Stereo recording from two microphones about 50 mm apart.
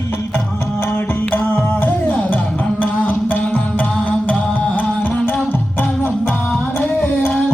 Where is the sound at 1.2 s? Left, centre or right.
Left.